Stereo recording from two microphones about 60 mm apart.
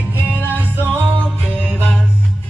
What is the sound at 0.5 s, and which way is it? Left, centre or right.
Music, right.